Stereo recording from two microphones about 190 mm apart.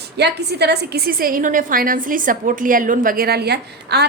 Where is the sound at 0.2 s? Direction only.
60° right (ahead or behind).